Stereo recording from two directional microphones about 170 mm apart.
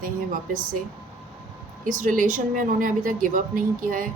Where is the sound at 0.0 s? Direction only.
50° right (ahead or behind).